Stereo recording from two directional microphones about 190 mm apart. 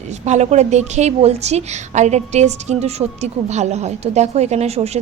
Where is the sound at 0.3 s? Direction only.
35° right (ahead or behind).